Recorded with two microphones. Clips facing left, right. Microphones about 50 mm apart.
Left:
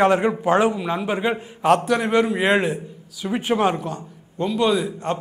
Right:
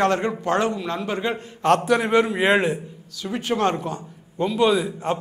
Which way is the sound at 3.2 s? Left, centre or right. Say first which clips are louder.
Left 3 dB; centre.